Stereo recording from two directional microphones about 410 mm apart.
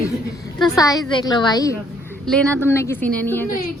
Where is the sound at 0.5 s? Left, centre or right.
Centre.